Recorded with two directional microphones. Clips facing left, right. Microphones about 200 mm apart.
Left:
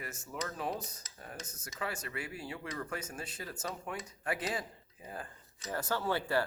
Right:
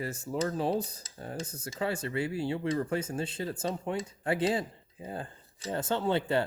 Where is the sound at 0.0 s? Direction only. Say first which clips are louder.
Right 9 dB; 30° right (ahead or behind).